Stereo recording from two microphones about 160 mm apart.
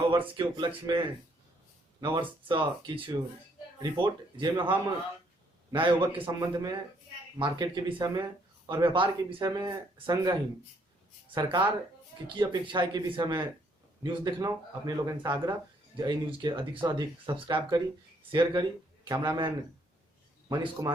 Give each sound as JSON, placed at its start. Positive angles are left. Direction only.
{"t": 0.1, "sound": "speech", "side_deg": -30}
{"t": 5.7, "sound": "a man's voice", "side_deg": -30}
{"t": 11.3, "sound": "a man's voice", "side_deg": -30}